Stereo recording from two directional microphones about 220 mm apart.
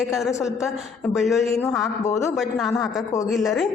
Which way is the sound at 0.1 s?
Centre (ahead or behind).